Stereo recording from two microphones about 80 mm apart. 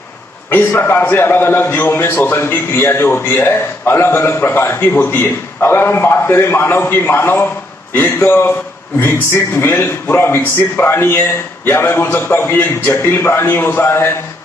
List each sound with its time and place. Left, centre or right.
0.5 s a man's voice: left